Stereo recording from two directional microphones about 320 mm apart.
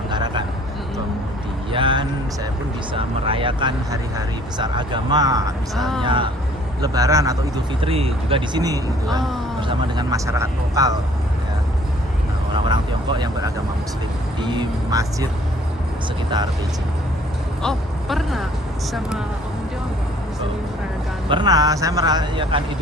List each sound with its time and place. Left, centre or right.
0.1 s a sound: centre
1.7 s speech: centre
5.7 s speech: centre
6.0 s speech: centre
12.5 s speech: centre
17.6 s speech: centre
21.2 s speech: centre